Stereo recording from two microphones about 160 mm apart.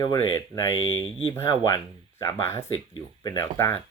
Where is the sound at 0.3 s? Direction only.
20° left (ahead or behind).